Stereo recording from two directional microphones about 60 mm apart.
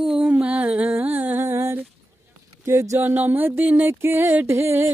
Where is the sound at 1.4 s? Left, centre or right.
Right.